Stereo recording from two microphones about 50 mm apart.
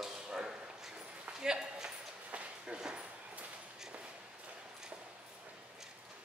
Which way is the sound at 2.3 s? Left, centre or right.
Centre.